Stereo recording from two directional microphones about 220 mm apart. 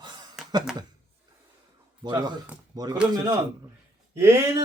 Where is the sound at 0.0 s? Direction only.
20° right (ahead or behind).